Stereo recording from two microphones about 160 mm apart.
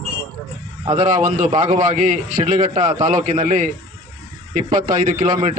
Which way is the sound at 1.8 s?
50° right (ahead or behind).